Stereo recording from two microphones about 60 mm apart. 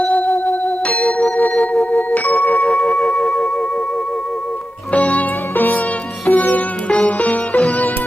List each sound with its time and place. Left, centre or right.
0.0 s music: left
2.6 s music: centre
4.9 s music: left